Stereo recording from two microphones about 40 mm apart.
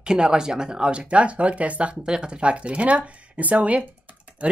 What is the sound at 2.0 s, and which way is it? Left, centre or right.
Speech, right.